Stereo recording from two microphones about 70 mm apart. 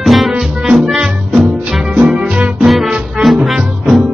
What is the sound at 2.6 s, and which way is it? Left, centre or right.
Music, centre.